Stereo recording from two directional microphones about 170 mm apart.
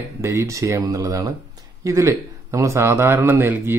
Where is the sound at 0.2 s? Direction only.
15° right (ahead or behind).